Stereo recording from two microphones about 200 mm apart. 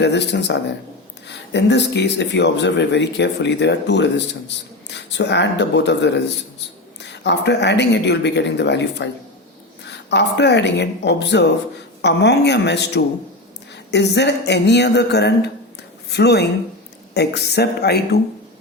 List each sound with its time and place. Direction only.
0.0 s speech: 60° left (ahead or behind)